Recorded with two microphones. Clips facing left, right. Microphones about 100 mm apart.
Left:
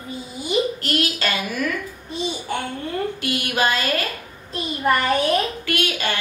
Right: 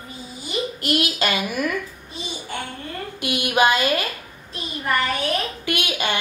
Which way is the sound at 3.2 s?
15° right (ahead or behind).